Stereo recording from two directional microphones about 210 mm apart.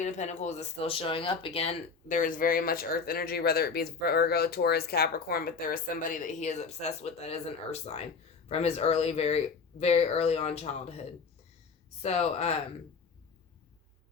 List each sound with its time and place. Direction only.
0.0 s speech: 35° left (ahead or behind)
12.0 s speech: 30° left (ahead or behind)